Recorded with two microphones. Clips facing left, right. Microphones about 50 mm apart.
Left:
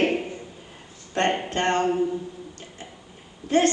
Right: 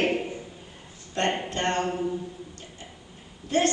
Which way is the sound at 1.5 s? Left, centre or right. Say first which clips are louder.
Left 4 dB; left.